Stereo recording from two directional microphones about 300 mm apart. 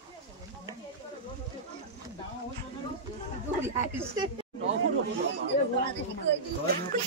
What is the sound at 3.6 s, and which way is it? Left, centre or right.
Speech, centre.